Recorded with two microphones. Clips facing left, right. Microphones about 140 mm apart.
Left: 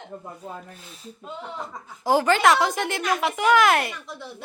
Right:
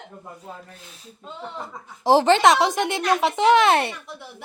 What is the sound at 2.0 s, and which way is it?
Speech, 25° right (ahead or behind).